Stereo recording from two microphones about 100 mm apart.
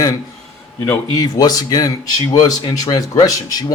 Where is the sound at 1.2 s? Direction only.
40° left (ahead or behind).